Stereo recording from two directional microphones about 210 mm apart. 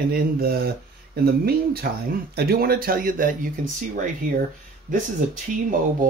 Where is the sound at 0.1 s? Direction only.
45° right (ahead or behind).